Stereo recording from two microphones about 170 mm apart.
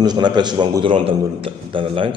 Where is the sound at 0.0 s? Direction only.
25° right (ahead or behind).